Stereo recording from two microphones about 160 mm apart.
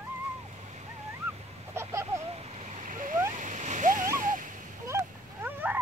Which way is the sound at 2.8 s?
55° right (ahead or behind).